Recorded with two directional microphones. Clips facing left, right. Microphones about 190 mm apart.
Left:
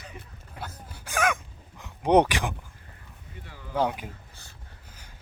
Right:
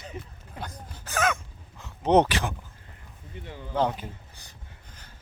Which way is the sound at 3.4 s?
25° right (ahead or behind).